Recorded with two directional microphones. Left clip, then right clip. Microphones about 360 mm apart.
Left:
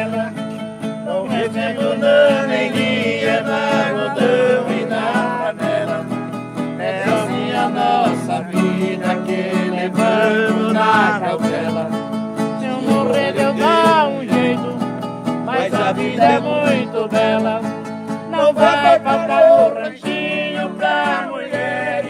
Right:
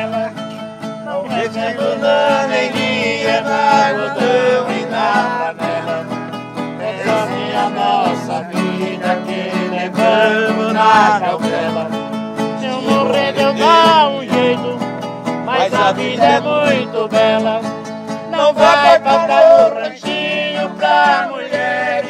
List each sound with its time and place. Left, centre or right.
2.7 s music: centre
7.2 s music: centre